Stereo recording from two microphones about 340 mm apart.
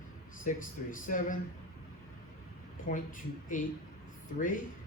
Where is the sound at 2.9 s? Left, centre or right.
Left.